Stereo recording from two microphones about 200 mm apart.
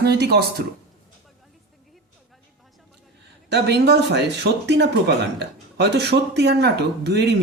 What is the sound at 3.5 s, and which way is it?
Speech, 55° right (ahead or behind).